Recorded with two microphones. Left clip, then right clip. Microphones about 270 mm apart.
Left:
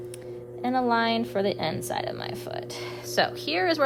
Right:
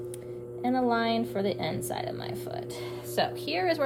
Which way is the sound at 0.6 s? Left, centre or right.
Left.